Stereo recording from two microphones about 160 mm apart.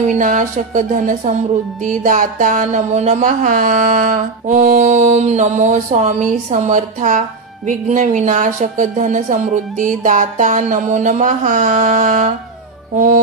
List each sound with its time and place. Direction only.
0.0 s music: 50° right (ahead or behind)